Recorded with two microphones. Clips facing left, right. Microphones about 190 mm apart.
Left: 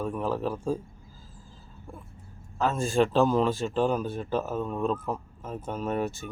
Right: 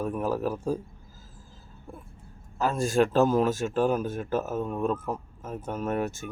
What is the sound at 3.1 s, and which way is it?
Speech, 45° right (ahead or behind).